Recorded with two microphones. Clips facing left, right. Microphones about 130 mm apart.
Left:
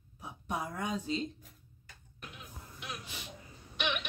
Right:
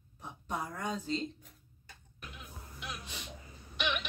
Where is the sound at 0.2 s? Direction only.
10° left (ahead or behind).